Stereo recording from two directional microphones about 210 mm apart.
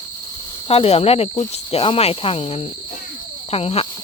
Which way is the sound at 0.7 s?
25° left (ahead or behind).